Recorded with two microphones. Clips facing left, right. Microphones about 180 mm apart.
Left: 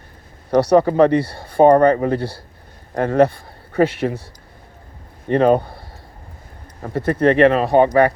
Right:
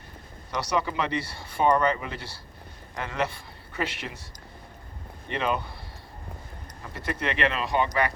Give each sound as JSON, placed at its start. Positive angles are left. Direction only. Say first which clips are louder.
{"t": 0.5, "sound": "speech", "louder": "left 14 dB", "side_deg": 55}
{"t": 5.3, "sound": "speech", "louder": "left 14 dB", "side_deg": 50}
{"t": 6.8, "sound": "speech", "louder": "left 15 dB", "side_deg": 50}